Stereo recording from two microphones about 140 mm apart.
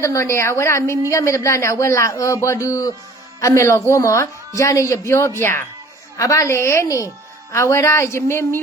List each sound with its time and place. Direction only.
0.0 s speech: 20° left (ahead or behind)